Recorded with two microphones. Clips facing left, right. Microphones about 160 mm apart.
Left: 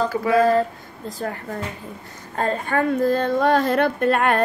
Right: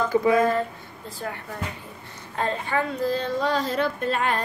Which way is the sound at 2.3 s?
45° left (ahead or behind).